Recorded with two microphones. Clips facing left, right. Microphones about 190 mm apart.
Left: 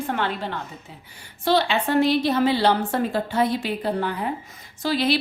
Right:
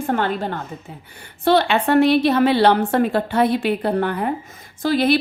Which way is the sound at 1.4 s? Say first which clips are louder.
Right 4 dB; 55° right (ahead or behind).